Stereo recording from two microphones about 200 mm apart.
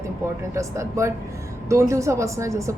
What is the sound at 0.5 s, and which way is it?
Speech, 15° right (ahead or behind).